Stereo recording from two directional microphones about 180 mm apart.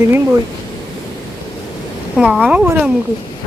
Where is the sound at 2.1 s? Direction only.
5° right (ahead or behind).